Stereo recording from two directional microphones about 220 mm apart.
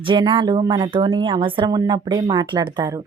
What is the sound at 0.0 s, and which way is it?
Speech, 20° right (ahead or behind).